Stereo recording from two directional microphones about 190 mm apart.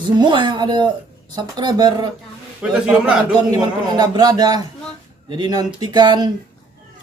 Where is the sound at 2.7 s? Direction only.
5° right (ahead or behind).